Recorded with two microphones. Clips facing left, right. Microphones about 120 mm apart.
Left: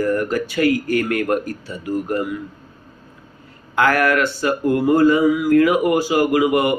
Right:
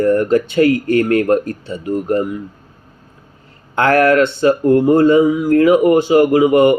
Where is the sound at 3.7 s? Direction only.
30° right (ahead or behind).